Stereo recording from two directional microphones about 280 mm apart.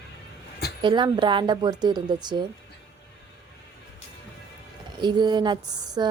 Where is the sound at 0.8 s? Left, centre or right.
Centre.